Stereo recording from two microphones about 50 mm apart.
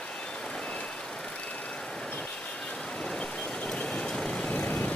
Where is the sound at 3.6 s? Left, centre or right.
Centre.